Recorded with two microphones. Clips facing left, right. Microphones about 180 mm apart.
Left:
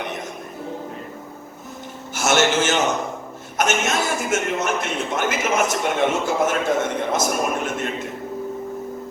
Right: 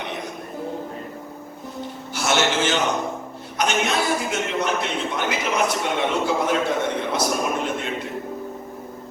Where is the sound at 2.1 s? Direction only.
45° left (ahead or behind).